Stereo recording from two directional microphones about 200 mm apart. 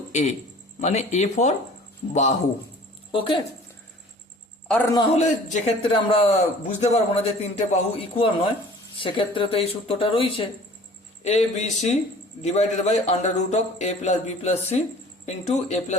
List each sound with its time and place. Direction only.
0.1 s a man's voice: 35° left (ahead or behind)
4.7 s a man's voice: 10° left (ahead or behind)
5.6 s a man's voice: 25° left (ahead or behind)